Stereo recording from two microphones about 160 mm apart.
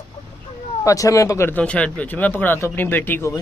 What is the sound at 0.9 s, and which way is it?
Speech, 20° left (ahead or behind).